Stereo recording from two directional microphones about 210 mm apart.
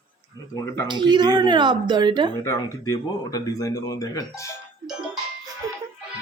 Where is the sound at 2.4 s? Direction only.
15° left (ahead or behind).